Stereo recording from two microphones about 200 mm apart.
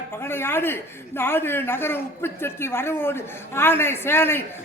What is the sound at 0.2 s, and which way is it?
A man's voice, 10° left (ahead or behind).